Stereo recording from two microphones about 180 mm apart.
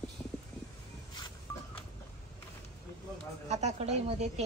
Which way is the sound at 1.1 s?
25° left (ahead or behind).